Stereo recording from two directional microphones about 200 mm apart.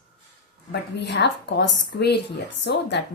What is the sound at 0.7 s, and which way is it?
A woman's voice, 60° left (ahead or behind).